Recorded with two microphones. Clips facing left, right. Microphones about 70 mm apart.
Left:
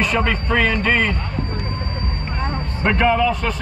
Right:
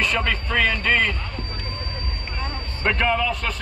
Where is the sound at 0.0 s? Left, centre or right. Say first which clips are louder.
Left 4 dB; centre.